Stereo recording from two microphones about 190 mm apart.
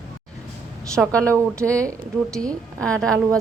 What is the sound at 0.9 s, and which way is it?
Speech, 5° left (ahead or behind).